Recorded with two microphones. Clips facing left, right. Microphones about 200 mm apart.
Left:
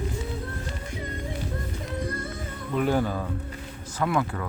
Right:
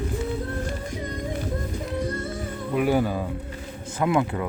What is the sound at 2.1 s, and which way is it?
Music, 30° right (ahead or behind).